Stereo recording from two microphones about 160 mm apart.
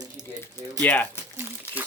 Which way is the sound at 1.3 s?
10° right (ahead or behind).